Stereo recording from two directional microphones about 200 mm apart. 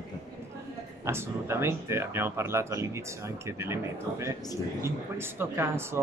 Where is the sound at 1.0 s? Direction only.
15° right (ahead or behind).